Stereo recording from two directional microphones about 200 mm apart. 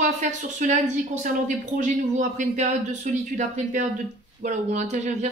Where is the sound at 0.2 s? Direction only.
40° right (ahead or behind).